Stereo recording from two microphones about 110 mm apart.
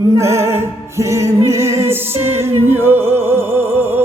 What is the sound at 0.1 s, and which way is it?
Music, 25° right (ahead or behind).